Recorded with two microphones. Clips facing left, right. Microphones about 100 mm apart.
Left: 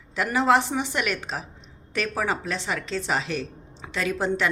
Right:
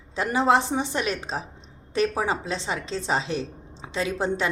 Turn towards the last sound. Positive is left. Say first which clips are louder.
# left 1 dB
turn(degrees=-30)  # may be behind; listen again after turning